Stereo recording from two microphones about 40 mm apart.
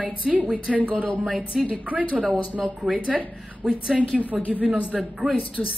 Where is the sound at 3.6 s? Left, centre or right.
Centre.